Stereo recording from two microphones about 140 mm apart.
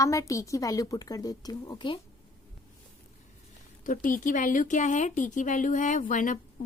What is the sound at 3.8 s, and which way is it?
Speech, 75° left (ahead or behind).